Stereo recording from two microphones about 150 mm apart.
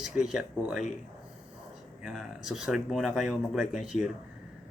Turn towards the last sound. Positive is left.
turn(degrees=-5)  # may be behind; listen again after turning